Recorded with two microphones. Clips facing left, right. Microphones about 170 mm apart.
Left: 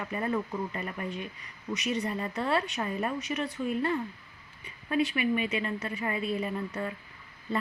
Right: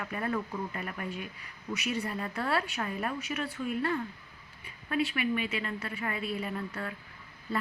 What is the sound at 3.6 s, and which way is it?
Speech, 15° left (ahead or behind).